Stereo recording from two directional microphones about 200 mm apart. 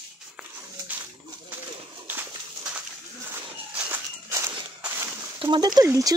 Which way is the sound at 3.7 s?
10° right (ahead or behind).